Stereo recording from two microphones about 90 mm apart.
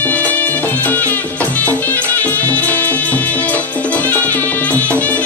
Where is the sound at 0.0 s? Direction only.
15° left (ahead or behind).